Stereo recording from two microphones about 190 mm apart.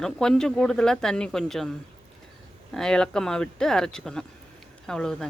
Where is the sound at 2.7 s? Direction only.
5° left (ahead or behind).